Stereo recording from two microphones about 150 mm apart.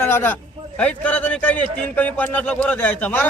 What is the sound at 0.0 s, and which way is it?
A man's voice, 15° left (ahead or behind).